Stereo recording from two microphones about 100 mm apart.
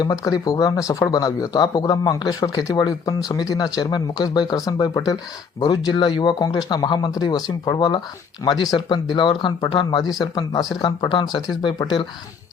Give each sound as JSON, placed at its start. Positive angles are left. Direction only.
{"t": 0.0, "sound": "speech", "side_deg": 40}